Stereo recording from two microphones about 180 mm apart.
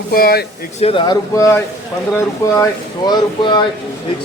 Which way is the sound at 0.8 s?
30° left (ahead or behind).